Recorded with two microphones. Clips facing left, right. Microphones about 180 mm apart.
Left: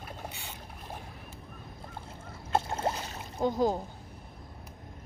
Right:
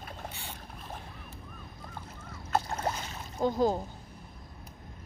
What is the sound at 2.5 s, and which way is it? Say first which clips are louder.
Boat: left 1 dB; 25° left (ahead or behind).